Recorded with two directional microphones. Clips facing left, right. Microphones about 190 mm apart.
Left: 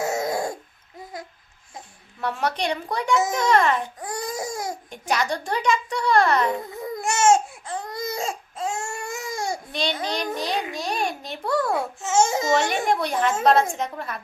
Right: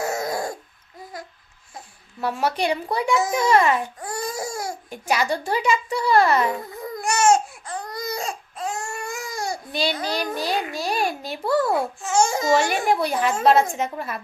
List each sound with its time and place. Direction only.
0.0 s hoot: 20° left (ahead or behind)
2.2 s speech: 5° right (ahead or behind)
4.0 s baby cry: 20° left (ahead or behind)
4.9 s a child's voice: 5° right (ahead or behind)
6.9 s baby cry: 25° left (ahead or behind)
9.7 s a child's voice: 5° right (ahead or behind)
12.0 s speech: 20° left (ahead or behind)
12.5 s a child's voice: 5° right (ahead or behind)